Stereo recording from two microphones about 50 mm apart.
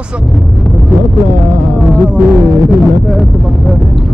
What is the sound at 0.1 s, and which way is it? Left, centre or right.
Speech, right.